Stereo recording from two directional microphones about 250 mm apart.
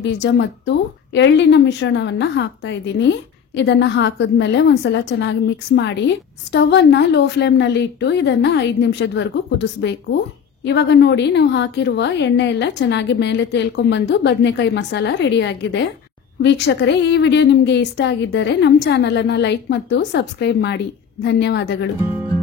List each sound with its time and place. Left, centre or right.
0.0 s a woman's voice: left